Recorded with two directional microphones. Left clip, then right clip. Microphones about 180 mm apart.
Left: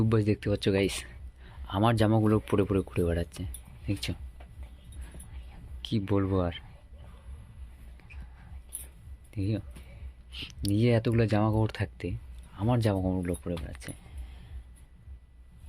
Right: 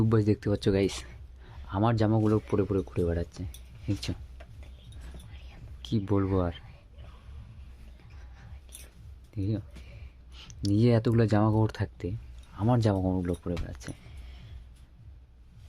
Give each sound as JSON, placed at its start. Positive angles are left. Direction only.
{"t": 0.0, "sound": "speech", "side_deg": -20}
{"t": 1.7, "sound": "speech", "side_deg": -5}
{"t": 3.8, "sound": "speech", "side_deg": -20}
{"t": 5.8, "sound": "speech", "side_deg": -20}
{"t": 9.3, "sound": "speech", "side_deg": -10}
{"t": 10.3, "sound": "speech", "side_deg": -20}